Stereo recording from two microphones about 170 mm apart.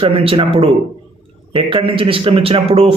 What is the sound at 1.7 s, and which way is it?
Speech, 30° right (ahead or behind).